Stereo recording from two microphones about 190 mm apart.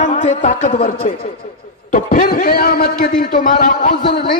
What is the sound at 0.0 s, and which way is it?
A man's voice, 40° left (ahead or behind).